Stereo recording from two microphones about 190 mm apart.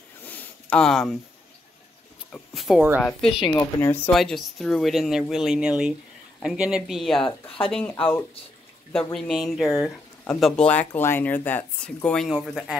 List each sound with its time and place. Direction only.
0.2 s a sound: 10° left (ahead or behind)
2.3 s speech: centre (ahead or behind)
4.1 s speech: centre (ahead or behind)
7.4 s speech: 30° left (ahead or behind)
8.9 s speech: 5° left (ahead or behind)